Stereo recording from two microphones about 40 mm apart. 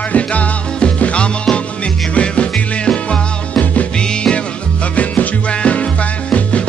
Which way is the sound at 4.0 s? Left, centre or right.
Left.